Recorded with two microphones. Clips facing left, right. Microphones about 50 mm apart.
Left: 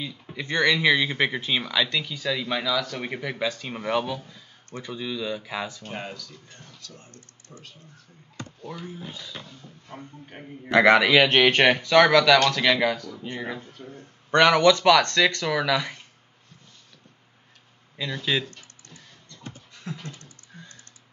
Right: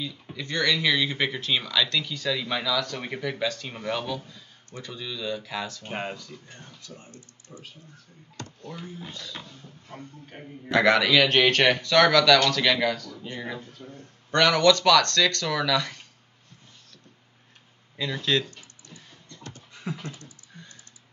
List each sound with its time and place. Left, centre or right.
0.4 s speech: left
5.9 s speech: right
7.1 s speech: left
8.6 s speech: centre
9.9 s a man's voice: centre
13.6 s a man's voice: left
18.2 s speech: centre
18.5 s a sound: centre
19.7 s typing: centre